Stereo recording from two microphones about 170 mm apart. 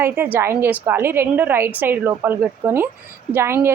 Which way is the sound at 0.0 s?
10° right (ahead or behind).